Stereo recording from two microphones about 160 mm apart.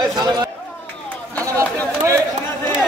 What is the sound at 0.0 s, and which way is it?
Speech, 25° right (ahead or behind).